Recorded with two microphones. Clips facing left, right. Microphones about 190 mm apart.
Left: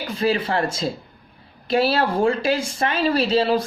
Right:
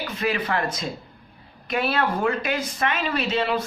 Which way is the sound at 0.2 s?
30° left (ahead or behind).